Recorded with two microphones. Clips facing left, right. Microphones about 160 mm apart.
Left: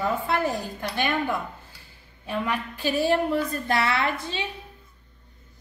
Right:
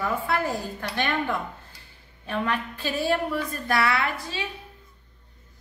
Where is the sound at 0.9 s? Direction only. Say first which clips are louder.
Left 1 dB; 10° left (ahead or behind).